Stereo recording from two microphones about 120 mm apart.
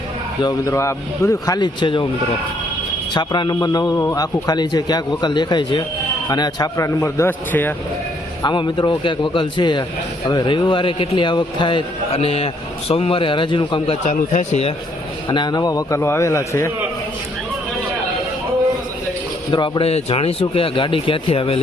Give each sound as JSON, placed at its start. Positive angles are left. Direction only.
{"t": 0.4, "sound": "a man's voice", "side_deg": 25}
{"t": 1.5, "sound": "a man's voice", "side_deg": 40}
{"t": 3.1, "sound": "a man's voice", "side_deg": 40}
{"t": 8.4, "sound": "a man's voice", "side_deg": 40}
{"t": 14.0, "sound": "speech", "side_deg": 80}
{"t": 15.3, "sound": "a man's voice", "side_deg": 35}
{"t": 19.5, "sound": "a man's voice", "side_deg": 40}
{"t": 19.8, "sound": "a man's voice", "side_deg": 55}